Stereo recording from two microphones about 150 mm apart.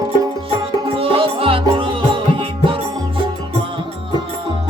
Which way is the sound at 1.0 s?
35° right (ahead or behind).